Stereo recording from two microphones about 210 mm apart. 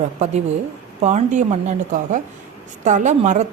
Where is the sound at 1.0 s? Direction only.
35° right (ahead or behind).